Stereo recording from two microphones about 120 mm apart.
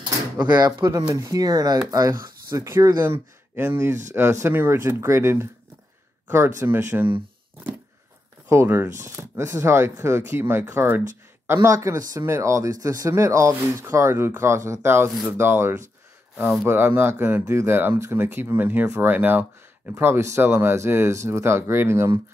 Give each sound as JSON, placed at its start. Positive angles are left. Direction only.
{"t": 0.6, "sound": "speech", "side_deg": -30}
{"t": 8.5, "sound": "speech", "side_deg": -20}